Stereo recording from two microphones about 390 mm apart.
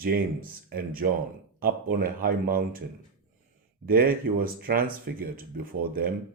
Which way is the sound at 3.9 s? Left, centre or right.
Right.